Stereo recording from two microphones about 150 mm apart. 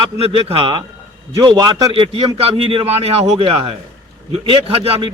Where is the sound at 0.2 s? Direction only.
40° right (ahead or behind).